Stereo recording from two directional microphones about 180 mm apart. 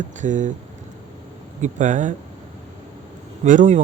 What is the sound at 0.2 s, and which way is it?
Speech, 45° right (ahead or behind).